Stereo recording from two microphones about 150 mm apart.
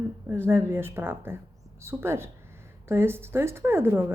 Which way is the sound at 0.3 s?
15° right (ahead or behind).